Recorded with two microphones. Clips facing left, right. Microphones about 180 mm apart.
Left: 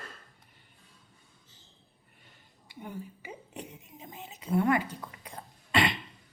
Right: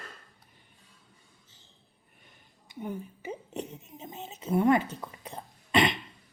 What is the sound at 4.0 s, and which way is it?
Cough, 25° right (ahead or behind).